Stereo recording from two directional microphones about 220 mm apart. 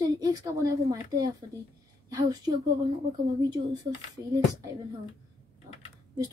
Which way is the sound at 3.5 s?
20° right (ahead or behind).